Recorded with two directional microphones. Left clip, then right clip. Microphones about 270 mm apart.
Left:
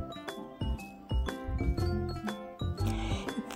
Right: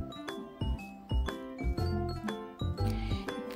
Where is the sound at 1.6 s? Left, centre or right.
Centre.